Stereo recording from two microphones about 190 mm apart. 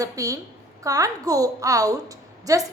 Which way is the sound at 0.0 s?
20° right (ahead or behind).